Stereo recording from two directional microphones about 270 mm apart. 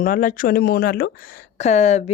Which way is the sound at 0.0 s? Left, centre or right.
Left.